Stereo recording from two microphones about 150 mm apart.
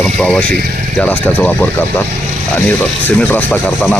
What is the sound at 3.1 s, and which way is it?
Speech, 10° left (ahead or behind).